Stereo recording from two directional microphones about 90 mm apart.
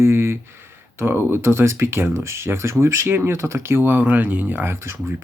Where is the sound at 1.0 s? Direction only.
25° right (ahead or behind).